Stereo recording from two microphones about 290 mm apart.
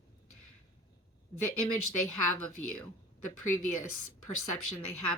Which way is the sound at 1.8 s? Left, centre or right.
Left.